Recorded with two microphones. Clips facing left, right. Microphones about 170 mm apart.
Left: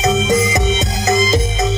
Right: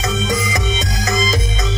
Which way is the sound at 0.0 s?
25° left (ahead or behind).